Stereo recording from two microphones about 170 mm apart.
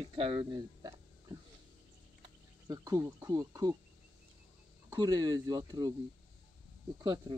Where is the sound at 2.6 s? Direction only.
20° right (ahead or behind).